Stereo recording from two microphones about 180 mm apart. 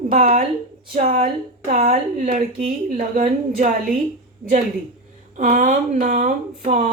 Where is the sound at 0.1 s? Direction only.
50° right (ahead or behind).